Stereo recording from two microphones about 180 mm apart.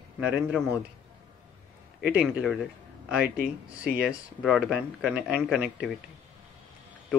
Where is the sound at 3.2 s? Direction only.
55° right (ahead or behind).